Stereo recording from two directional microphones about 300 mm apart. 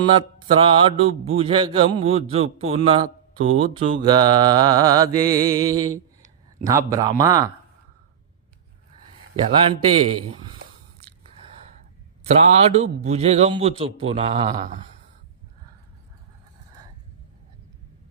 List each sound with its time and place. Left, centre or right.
0.0 s a man's voice: centre
12.2 s a man's voice: right